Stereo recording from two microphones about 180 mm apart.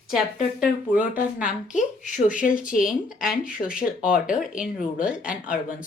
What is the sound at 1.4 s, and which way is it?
Speech, 45° left (ahead or behind).